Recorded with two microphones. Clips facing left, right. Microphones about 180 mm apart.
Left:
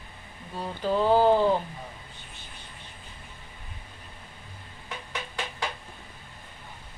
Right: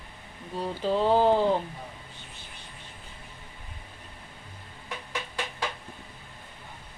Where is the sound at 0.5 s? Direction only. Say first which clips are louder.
Even; 25° right (ahead or behind).